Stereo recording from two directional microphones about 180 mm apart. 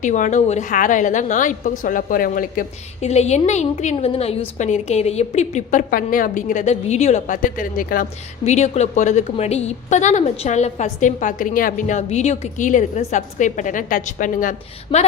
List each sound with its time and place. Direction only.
0.0 s a woman's voice: 45° left (ahead or behind)
8.4 s a woman's voice: 40° left (ahead or behind)
14.9 s speech: 30° left (ahead or behind)